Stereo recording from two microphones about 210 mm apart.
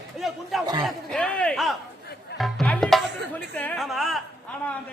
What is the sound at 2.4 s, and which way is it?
Music, 5° left (ahead or behind).